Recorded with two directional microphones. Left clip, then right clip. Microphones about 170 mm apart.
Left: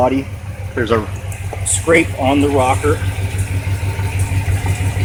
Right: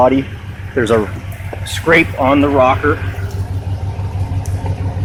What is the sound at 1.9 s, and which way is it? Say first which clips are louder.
Speech: right 2 dB; 35° right (ahead or behind).